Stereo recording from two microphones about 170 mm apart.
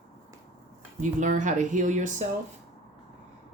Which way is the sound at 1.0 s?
50° right (ahead or behind).